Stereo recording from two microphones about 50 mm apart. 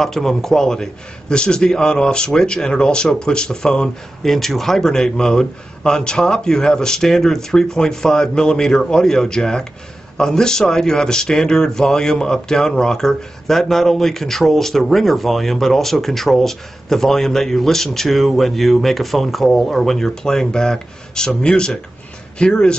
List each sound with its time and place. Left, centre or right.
0.0 s speech: centre